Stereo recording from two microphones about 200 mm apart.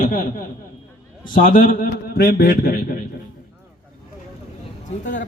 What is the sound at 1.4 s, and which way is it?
A man's voice, 45° left (ahead or behind).